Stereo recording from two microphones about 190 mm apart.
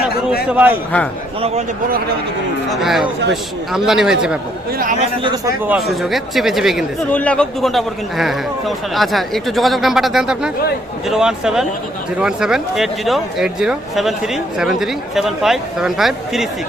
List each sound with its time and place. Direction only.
0.4 s a man's voice: 10° right (ahead or behind)
1.4 s speech: 35° right (ahead or behind)
2.6 s speech: centre (ahead or behind)
4.8 s speech: 45° right (ahead or behind)
5.2 s a man's voice: 20° right (ahead or behind)
5.6 s speech: centre (ahead or behind)